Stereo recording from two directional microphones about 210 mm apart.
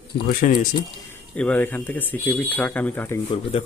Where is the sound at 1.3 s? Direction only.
5° left (ahead or behind).